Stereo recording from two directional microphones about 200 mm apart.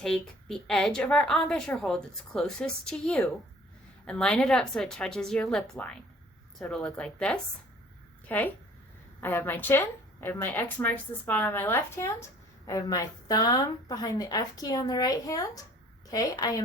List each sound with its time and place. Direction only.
0.0 s a woman's voice: centre (ahead or behind); by 16.6 s 20° left (ahead or behind)